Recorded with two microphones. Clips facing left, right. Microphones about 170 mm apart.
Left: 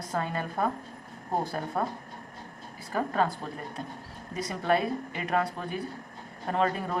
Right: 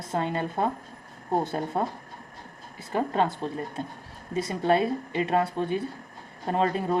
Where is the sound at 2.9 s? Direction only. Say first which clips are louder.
Right 2 dB; 25° right (ahead or behind).